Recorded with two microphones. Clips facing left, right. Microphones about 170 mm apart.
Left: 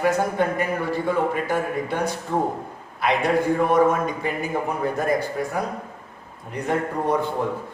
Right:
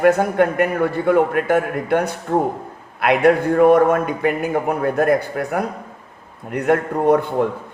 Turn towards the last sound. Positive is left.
turn(degrees=-60)  # may be behind; listen again after turning